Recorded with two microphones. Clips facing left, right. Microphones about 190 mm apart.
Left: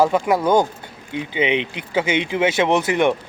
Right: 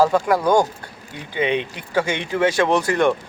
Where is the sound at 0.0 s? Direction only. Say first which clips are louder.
Even; 20° left (ahead or behind).